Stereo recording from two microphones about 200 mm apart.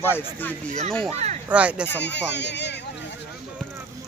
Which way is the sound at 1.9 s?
60° left (ahead or behind).